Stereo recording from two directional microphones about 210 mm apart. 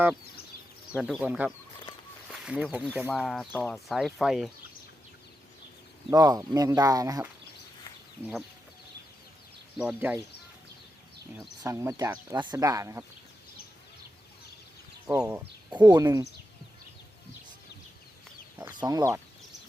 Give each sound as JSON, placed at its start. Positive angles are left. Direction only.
{"t": 0.9, "sound": "speech", "side_deg": -5}
{"t": 6.1, "sound": "speech", "side_deg": -15}
{"t": 9.7, "sound": "speech", "side_deg": -5}
{"t": 11.6, "sound": "speech", "side_deg": -15}
{"t": 15.1, "sound": "speech", "side_deg": -10}
{"t": 15.7, "sound": "speech", "side_deg": -20}
{"t": 18.6, "sound": "speech", "side_deg": -15}